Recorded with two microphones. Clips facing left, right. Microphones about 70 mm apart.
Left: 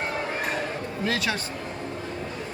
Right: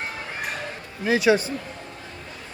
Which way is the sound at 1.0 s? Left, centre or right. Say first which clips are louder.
Right 9 dB; centre.